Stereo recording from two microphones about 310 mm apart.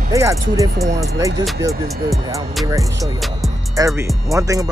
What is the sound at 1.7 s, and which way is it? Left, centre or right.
Speech, centre.